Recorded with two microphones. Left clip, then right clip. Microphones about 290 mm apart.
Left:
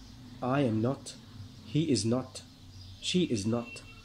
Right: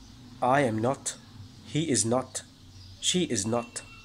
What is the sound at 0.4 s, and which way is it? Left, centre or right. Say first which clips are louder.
Speech: right 6 dB; right.